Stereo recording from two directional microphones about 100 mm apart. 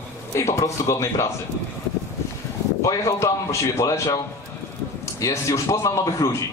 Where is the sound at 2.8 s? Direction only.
35° left (ahead or behind).